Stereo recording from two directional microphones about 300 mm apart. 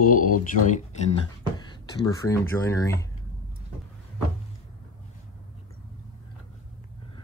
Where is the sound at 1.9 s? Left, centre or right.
Centre.